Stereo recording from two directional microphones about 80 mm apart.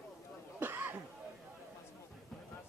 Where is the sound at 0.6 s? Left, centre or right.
Right.